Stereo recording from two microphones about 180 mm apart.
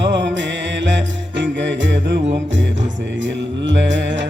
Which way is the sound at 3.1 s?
90° right.